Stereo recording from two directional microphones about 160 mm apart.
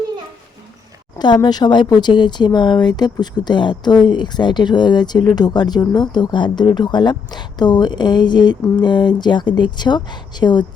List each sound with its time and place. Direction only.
1.2 s speech: 25° left (ahead or behind)